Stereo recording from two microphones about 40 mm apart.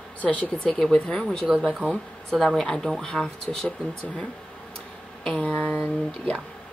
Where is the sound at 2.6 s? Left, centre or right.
Centre.